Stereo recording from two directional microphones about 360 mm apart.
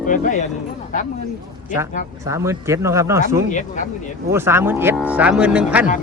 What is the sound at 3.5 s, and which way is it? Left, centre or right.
Speech, left.